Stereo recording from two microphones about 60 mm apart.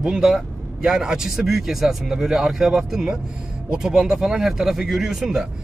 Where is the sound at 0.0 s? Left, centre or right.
Centre.